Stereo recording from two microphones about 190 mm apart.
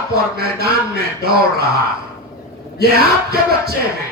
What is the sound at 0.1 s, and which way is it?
Speech, 55° right (ahead or behind).